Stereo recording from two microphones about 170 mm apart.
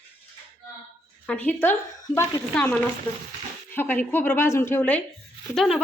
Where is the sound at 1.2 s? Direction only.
10° left (ahead or behind).